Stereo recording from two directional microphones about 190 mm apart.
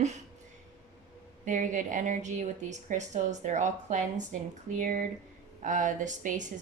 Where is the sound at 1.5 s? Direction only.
45° right (ahead or behind).